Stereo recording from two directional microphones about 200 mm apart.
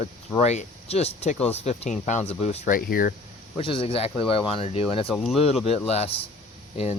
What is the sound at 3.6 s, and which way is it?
Speech, 25° left (ahead or behind).